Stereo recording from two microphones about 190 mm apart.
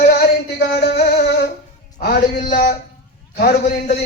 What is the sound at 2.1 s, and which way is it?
A man's voice, 55° left (ahead or behind).